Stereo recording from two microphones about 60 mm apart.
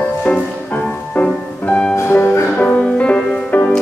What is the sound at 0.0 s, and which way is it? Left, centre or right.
Music, left.